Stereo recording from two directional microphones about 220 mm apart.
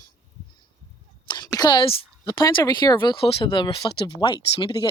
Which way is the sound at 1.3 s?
15° left (ahead or behind).